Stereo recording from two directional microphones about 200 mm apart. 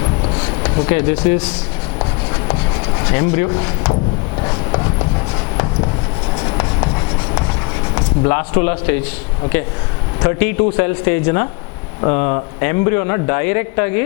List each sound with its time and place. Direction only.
0.3 s speech: 15° left (ahead or behind)
2.0 s rub: 20° left (ahead or behind)
4.4 s a sound: 20° left (ahead or behind)
6.3 s writing: 25° left (ahead or behind)
7.9 s speech: 15° left (ahead or behind)
10.2 s a man's voice: 15° left (ahead or behind)